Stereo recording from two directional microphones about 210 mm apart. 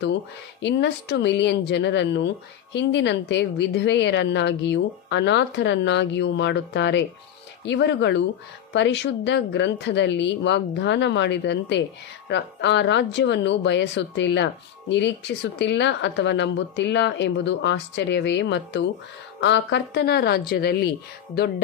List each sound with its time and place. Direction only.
0.6 s a woman's voice: 55° left (ahead or behind)